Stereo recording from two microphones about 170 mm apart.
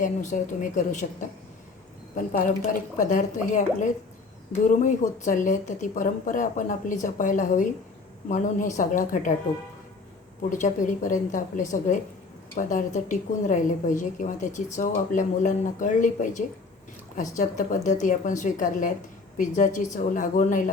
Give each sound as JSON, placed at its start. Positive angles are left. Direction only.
{"t": 0.0, "sound": "a woman's voice", "side_deg": 45}
{"t": 3.0, "sound": "a woman's voice", "side_deg": 50}
{"t": 10.5, "sound": "a woman's voice", "side_deg": 50}